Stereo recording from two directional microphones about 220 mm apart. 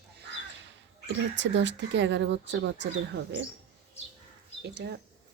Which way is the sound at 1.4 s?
55° right (ahead or behind).